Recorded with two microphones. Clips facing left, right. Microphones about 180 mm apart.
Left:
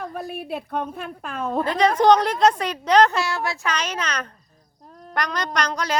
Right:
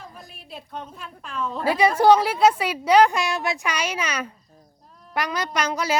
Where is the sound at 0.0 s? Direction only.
60° left (ahead or behind).